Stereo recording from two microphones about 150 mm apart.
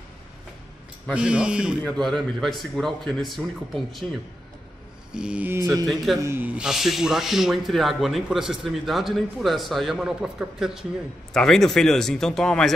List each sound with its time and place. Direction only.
1.1 s speech: 5° right (ahead or behind)
1.8 s speech: 5° left (ahead or behind)
5.1 s mantra: 5° right (ahead or behind)
6.1 s speech: 15° right (ahead or behind); by 12.7 s 5° left (ahead or behind)